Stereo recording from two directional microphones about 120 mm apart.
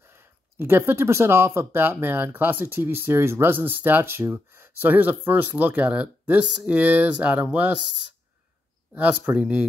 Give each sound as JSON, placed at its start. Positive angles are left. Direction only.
{"t": 0.1, "sound": "speech", "side_deg": -20}
{"t": 8.9, "sound": "speech", "side_deg": -10}